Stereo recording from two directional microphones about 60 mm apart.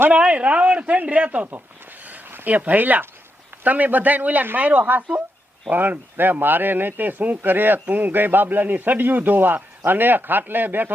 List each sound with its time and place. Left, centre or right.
0.1 s speech: right